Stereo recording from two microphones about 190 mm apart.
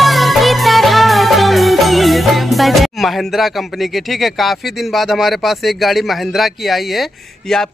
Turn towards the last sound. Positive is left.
turn(degrees=0)  # may be behind; listen again after turning